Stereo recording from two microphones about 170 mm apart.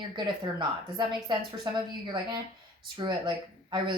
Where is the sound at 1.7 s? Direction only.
25° right (ahead or behind).